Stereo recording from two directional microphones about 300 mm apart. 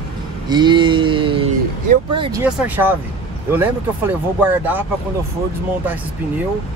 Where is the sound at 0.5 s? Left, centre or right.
Centre.